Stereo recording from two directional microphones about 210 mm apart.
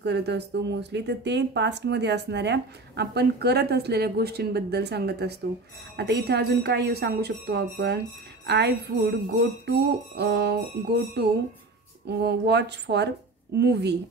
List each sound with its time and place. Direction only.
0.0 s speech: 55° right (ahead or behind)